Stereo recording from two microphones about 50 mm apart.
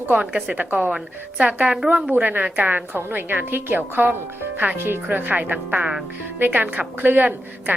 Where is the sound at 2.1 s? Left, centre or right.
Right.